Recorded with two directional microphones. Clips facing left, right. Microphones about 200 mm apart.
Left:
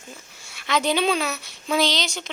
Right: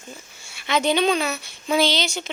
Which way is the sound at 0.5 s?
Centre (ahead or behind).